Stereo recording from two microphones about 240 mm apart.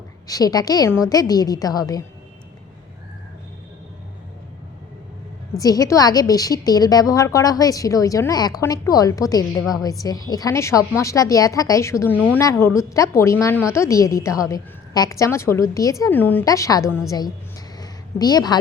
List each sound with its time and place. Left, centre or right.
0.3 s a woman's voice: centre
5.5 s a woman's voice: centre
17.7 s a sound: centre